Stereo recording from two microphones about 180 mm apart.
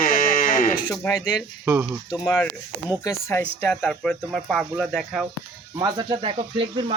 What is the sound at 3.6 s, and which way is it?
Speech, 5° left (ahead or behind).